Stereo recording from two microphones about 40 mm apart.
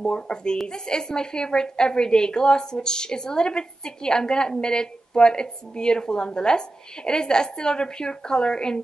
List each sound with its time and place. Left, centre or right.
0.0 s a woman's voice: left